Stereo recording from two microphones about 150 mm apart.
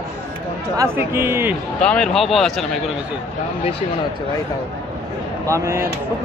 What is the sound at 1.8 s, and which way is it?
Speech, 5° left (ahead or behind).